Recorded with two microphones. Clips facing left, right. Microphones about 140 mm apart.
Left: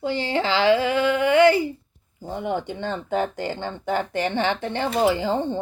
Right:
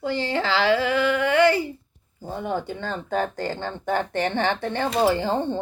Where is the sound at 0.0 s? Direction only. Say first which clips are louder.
Left 1 dB; 20° left (ahead or behind).